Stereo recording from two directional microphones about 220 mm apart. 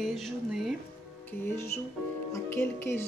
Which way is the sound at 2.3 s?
10° left (ahead or behind).